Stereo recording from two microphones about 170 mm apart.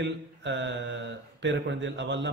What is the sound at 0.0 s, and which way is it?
Speech, 90° right.